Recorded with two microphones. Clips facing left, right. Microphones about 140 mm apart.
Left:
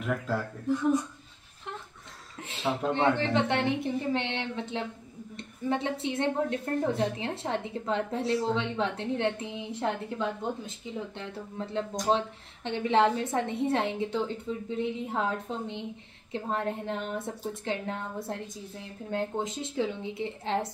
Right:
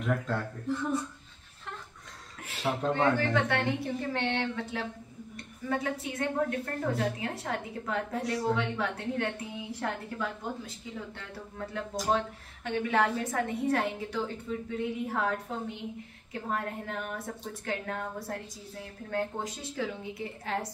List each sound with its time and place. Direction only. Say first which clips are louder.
0.0 s speech: even; centre (ahead or behind)
2.4 s a woman's voice: left 1 dB; 25° left (ahead or behind)